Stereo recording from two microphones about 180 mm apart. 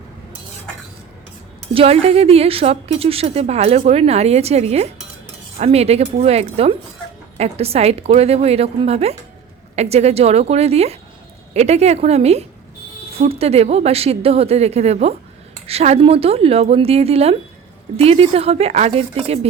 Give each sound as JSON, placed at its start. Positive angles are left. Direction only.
{"t": 1.7, "sound": "a woman's voice", "side_deg": -30}